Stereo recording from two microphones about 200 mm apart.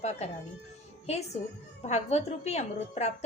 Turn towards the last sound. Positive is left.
turn(degrees=35)  # may be behind; listen again after turning